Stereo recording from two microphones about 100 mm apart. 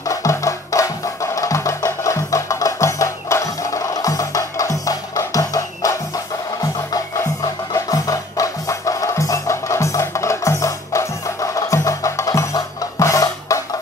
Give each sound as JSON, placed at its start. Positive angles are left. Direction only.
{"t": 0.0, "sound": "music", "side_deg": 35}
{"t": 7.7, "sound": "music", "side_deg": 35}